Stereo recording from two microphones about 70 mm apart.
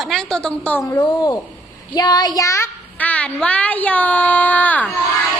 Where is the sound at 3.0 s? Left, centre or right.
Centre.